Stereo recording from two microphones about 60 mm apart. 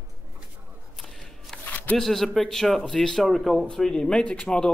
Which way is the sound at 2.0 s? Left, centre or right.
Centre.